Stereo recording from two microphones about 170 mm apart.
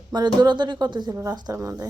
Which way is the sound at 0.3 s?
25° right (ahead or behind).